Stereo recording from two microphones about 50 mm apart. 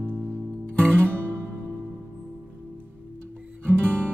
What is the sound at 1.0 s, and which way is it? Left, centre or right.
Music, right.